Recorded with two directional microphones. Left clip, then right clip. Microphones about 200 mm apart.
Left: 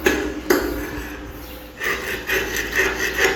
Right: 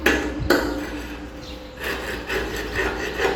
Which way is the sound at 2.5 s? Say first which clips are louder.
Left 5 dB; 30° right (ahead or behind).